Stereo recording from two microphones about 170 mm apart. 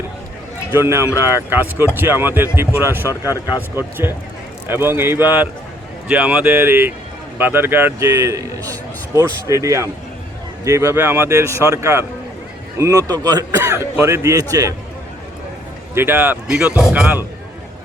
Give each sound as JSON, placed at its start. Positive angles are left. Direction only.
{"t": 0.7, "sound": "a man's voice", "side_deg": -15}
{"t": 3.1, "sound": "speech", "side_deg": 20}
{"t": 3.8, "sound": "a man's voice", "side_deg": -15}
{"t": 16.0, "sound": "a man's voice", "side_deg": -10}